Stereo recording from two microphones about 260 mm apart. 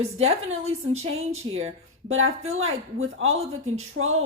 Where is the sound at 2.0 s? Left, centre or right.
Right.